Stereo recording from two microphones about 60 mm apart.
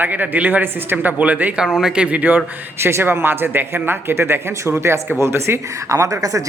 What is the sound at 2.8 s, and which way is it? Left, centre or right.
Speech, right.